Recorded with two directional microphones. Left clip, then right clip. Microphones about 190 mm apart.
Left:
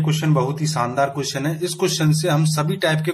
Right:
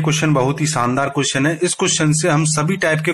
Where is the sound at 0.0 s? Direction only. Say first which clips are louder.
Right 5 dB; 35° right (ahead or behind).